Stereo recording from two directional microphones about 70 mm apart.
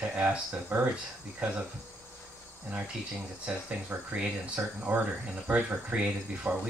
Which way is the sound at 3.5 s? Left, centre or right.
Centre.